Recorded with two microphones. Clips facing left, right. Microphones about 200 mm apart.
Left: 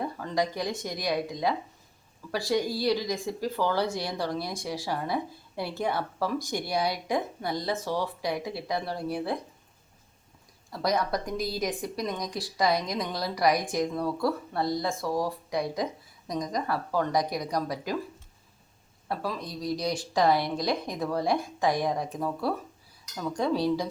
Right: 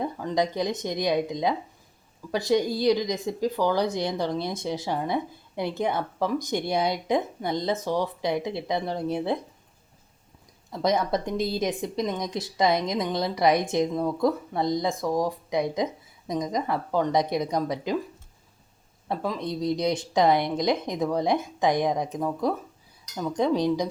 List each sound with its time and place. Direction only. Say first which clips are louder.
0.0 s speech: right 3 dB; 15° right (ahead or behind)
10.7 s speech: right 3 dB; 20° right (ahead or behind)
19.0 s speech: right 4 dB; 20° right (ahead or behind)